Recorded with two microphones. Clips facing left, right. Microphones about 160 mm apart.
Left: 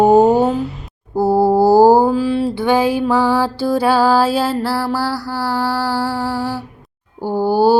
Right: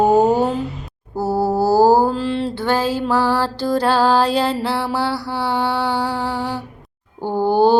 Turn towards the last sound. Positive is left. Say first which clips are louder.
# left 1 dB
turn(degrees=5)  # may be behind; listen again after turning